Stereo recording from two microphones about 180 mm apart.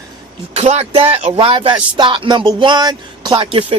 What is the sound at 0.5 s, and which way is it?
Speech, 35° right (ahead or behind).